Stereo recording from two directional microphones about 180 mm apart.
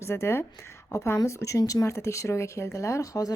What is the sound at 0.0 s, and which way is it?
A woman's voice, 15° left (ahead or behind).